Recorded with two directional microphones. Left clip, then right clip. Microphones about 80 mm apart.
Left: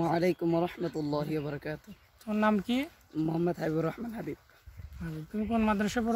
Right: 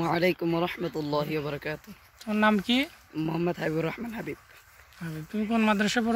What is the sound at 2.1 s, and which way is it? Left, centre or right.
Speech, right.